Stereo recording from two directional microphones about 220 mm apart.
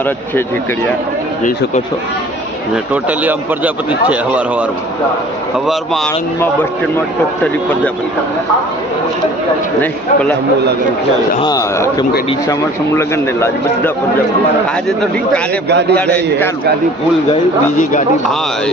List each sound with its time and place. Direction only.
2.9 s speech: 5° right (ahead or behind)
5.6 s speech: centre (ahead or behind)
9.8 s speech: 5° left (ahead or behind)
11.3 s speech: 15° left (ahead or behind)
15.7 s a man's voice: 50° right (ahead or behind)
16.0 s speech: 5° left (ahead or behind)